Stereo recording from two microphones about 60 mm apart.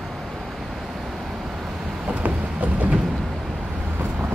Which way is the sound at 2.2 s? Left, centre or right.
Right.